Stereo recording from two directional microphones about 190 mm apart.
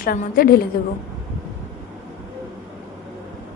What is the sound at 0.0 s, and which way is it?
Speech, 50° left (ahead or behind).